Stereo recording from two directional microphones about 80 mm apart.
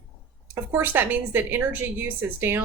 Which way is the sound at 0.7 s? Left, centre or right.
Right.